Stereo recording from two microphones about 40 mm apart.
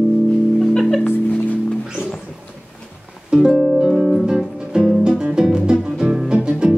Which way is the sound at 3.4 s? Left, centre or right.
Centre.